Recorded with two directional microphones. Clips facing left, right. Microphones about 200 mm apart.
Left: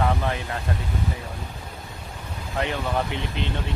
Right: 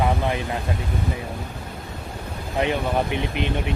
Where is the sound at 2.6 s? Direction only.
20° right (ahead or behind).